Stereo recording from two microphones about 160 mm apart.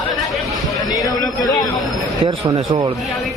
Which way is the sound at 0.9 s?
25° left (ahead or behind).